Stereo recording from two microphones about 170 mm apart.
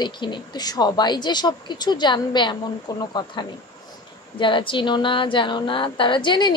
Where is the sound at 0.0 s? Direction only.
25° left (ahead or behind).